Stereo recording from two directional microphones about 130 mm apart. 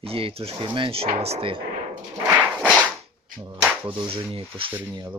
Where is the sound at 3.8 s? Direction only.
45° right (ahead or behind).